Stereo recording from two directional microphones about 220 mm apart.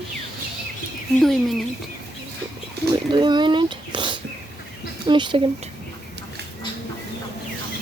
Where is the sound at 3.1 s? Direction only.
20° right (ahead or behind).